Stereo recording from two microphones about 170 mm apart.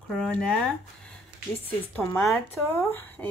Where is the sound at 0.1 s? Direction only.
5° left (ahead or behind).